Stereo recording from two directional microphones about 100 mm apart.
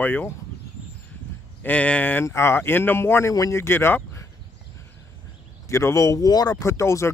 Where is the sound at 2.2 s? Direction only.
25° left (ahead or behind).